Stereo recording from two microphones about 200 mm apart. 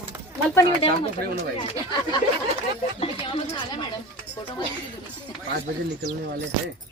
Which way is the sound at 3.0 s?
25° left (ahead or behind).